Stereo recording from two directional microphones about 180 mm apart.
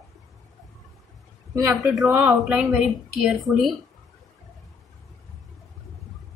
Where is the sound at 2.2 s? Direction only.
Centre (ahead or behind).